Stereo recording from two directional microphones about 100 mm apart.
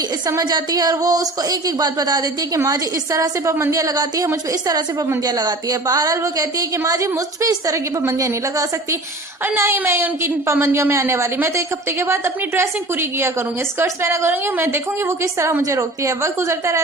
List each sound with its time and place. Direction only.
0.3 s a woman's voice: 40° right (ahead or behind)